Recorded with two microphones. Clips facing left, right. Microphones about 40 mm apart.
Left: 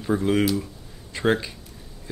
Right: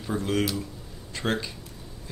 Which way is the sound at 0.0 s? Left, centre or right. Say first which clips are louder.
Left 5 dB; centre.